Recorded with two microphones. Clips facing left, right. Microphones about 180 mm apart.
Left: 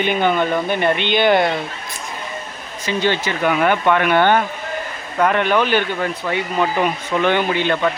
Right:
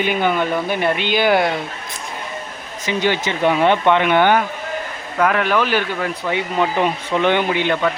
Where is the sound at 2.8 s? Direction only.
15° right (ahead or behind).